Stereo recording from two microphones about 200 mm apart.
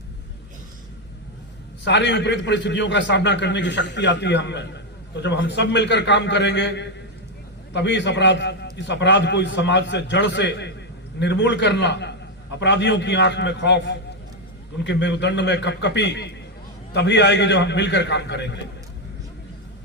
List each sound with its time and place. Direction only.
1.8 s a man's voice: 60° left (ahead or behind)